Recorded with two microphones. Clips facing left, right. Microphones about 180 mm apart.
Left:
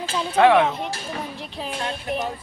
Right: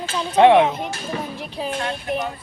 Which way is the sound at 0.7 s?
Centre (ahead or behind).